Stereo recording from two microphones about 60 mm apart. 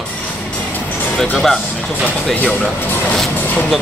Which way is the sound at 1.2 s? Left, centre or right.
Centre.